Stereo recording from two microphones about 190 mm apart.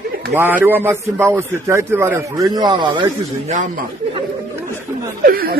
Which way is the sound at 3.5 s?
40° right (ahead or behind).